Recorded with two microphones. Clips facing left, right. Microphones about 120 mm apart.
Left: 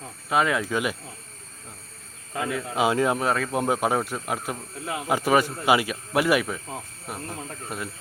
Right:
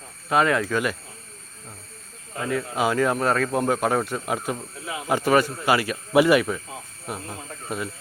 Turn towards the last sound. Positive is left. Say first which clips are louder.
# right 2 dB
turn(degrees=0)  # may be behind; listen again after turning